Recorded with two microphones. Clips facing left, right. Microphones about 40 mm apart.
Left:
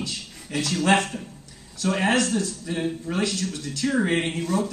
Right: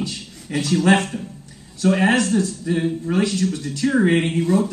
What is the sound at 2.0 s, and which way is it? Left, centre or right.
Speech, centre.